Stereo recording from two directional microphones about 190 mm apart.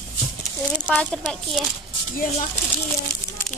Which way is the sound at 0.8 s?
Centre (ahead or behind).